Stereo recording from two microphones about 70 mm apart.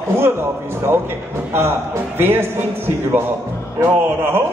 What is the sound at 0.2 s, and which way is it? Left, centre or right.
Music, right.